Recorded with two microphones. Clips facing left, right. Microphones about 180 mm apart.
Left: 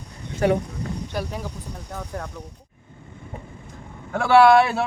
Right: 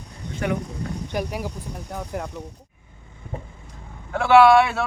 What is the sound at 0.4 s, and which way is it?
Speech, 35° left (ahead or behind).